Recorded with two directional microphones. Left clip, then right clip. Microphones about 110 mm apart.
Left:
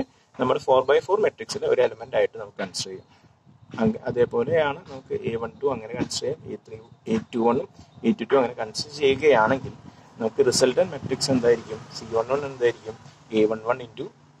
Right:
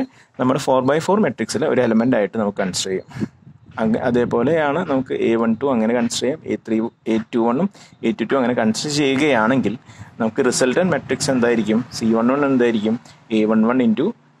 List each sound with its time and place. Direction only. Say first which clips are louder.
0.0 s speech: right 5 dB; 30° right (ahead or behind)